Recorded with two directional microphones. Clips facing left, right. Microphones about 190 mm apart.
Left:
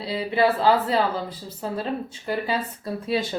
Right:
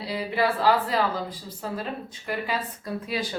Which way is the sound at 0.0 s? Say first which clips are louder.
Left 4 dB; 25° left (ahead or behind).